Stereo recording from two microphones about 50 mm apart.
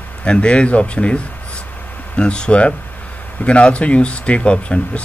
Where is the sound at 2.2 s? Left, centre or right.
Left.